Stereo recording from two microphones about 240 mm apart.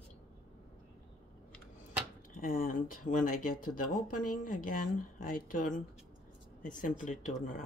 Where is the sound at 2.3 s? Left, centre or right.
Left.